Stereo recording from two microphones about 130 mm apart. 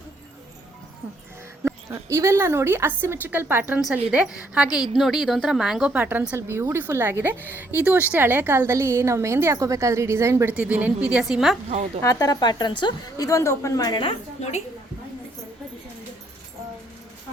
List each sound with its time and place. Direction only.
1.6 s speech: 20° right (ahead or behind)
10.5 s speech: 10° right (ahead or behind)
12.0 s a woman's voice: 30° left (ahead or behind)